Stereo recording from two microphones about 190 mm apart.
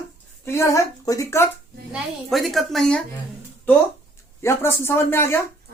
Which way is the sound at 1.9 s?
Centre (ahead or behind).